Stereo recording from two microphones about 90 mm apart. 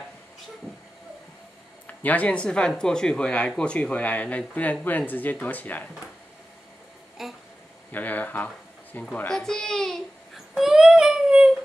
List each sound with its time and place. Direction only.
1.9 s speech: 15° left (ahead or behind)
7.2 s a child's voice: 5° right (ahead or behind)
7.9 s speech: 20° left (ahead or behind)
9.3 s a child's voice: 5° left (ahead or behind)
10.3 s a sound: 5° right (ahead or behind)